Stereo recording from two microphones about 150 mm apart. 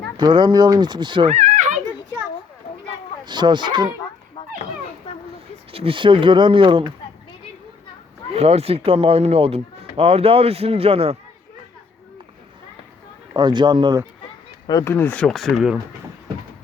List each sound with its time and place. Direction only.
0.2 s speech: 30° right (ahead or behind)
1.3 s a sound: 55° right (ahead or behind)
3.2 s speech: 30° right (ahead or behind)
5.7 s speech: 35° right (ahead or behind)
8.3 s speech: 45° right (ahead or behind)
13.3 s a man's voice: 30° right (ahead or behind)
14.7 s speech: 20° left (ahead or behind); by 15.8 s centre (ahead or behind)